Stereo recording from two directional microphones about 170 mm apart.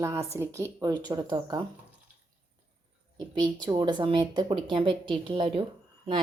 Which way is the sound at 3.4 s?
25° right (ahead or behind).